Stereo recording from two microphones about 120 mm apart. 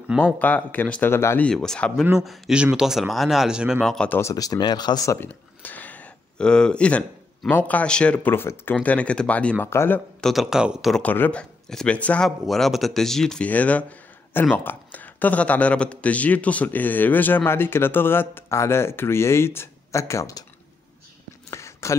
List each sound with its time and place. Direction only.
0.2 s a man's voice: 15° left (ahead or behind)
1.5 s speech: 5° left (ahead or behind)
3.9 s a man's voice: 10° left (ahead or behind)
4.2 s a man's voice: 30° left (ahead or behind)
10.2 s speech: centre (ahead or behind)
11.0 s a man's voice: 15° left (ahead or behind)
21.5 s a sound: 25° left (ahead or behind)